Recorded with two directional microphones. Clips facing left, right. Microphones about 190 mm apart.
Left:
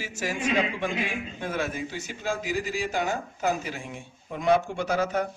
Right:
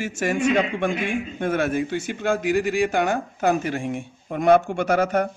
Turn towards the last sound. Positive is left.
turn(degrees=-55)  # may be behind; listen again after turning